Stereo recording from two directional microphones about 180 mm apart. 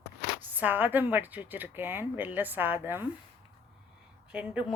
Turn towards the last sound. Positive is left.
turn(degrees=-5)  # may be behind; listen again after turning